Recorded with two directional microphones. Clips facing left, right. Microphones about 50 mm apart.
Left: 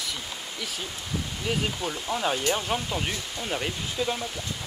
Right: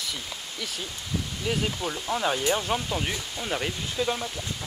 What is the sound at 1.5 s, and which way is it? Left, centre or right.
Speech, centre.